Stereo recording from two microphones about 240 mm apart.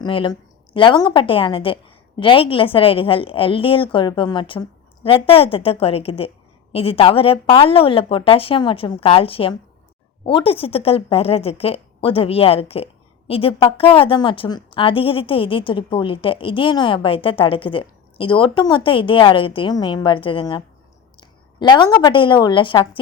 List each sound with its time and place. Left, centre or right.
0.0 s a woman's voice: centre